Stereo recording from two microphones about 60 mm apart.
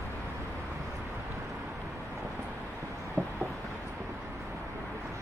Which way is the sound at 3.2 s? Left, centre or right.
Right.